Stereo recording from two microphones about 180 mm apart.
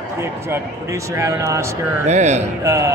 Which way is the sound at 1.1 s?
15° right (ahead or behind).